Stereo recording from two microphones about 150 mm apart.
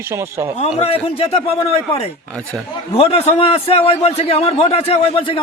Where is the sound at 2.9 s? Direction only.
40° left (ahead or behind).